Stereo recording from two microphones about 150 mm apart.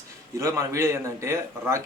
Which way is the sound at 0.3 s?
20° right (ahead or behind).